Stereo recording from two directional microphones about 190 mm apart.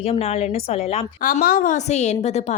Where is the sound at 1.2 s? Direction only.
45° left (ahead or behind).